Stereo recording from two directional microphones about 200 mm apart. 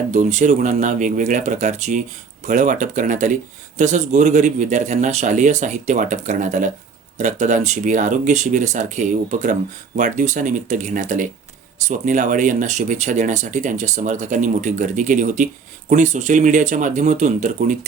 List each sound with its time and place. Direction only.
0.1 s speech: 35° right (ahead or behind)